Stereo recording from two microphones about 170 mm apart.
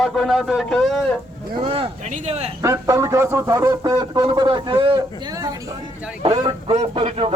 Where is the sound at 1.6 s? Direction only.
30° right (ahead or behind).